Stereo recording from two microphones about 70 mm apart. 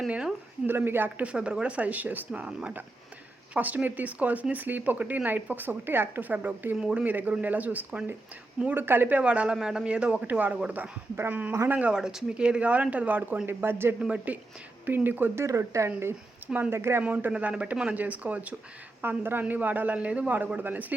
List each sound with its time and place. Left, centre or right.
0.1 s speech: centre
0.7 s speech: right
1.2 s speech: centre
6.7 s speech: centre
7.0 s speech: right
8.6 s speech: right
14.0 s speech: centre
15.4 s speech: right
16.6 s speech: right
17.0 s speech: right